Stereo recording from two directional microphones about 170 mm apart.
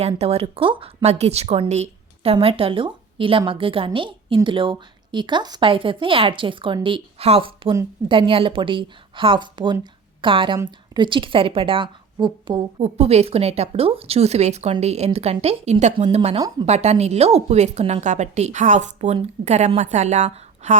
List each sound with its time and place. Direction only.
0.2 s a woman's voice: 35° right (ahead or behind)
12.8 s speech: 40° right (ahead or behind)